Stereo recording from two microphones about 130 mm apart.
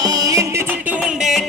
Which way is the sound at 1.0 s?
Centre (ahead or behind).